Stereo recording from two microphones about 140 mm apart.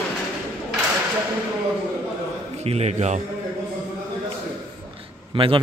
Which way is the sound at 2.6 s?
50° right (ahead or behind).